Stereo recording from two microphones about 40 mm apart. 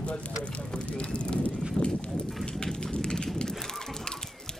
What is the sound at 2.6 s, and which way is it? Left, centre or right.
Speech, centre.